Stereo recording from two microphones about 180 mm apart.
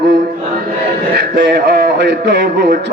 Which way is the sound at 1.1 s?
65° right (ahead or behind).